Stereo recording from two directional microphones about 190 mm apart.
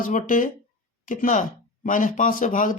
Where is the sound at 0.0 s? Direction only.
45° left (ahead or behind).